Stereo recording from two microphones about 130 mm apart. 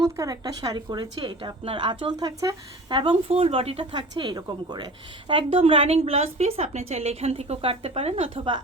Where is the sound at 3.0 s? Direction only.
45° right (ahead or behind).